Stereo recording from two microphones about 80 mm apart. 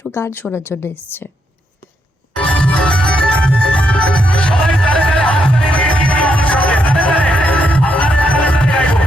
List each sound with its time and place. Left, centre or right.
0.0 s a woman's voice: left
2.3 s music: centre